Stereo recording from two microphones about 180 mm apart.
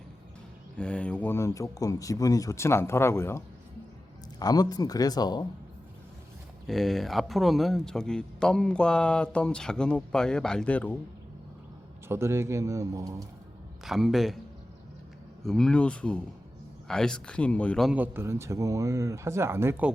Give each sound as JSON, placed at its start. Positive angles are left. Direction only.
{"t": 0.8, "sound": "speech", "side_deg": 5}
{"t": 6.7, "sound": "a man's voice", "side_deg": 0}
{"t": 12.0, "sound": "speech", "side_deg": -15}
{"t": 13.8, "sound": "a man's voice", "side_deg": 0}
{"t": 15.4, "sound": "a man's voice", "side_deg": 5}
{"t": 17.9, "sound": "speech", "side_deg": -10}